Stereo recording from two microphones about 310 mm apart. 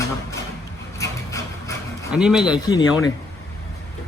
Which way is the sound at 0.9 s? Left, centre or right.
Centre.